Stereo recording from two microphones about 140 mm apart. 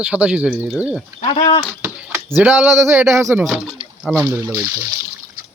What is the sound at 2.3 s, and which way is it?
Speech, 10° right (ahead or behind).